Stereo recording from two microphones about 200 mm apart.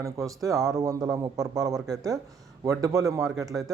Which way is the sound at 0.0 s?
15° right (ahead or behind).